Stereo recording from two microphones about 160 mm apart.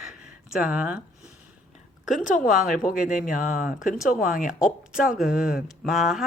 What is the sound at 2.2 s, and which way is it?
A woman's voice, 50° left (ahead or behind).